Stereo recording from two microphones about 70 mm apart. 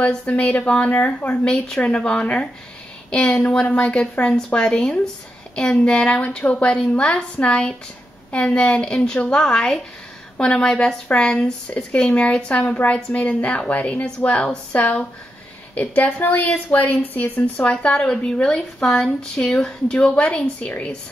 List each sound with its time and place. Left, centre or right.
0.0 s a woman's voice: centre
17.6 s speech: centre